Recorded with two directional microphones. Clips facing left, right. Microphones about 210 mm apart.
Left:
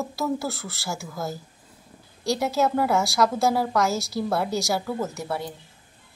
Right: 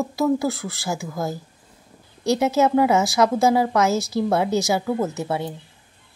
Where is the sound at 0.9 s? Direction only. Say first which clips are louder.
Right 4 dB; 15° right (ahead or behind).